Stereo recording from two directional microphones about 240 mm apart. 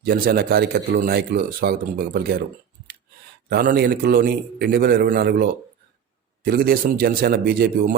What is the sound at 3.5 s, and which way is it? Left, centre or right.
Speech, right.